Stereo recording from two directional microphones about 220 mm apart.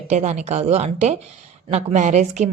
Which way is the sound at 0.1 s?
30° right (ahead or behind).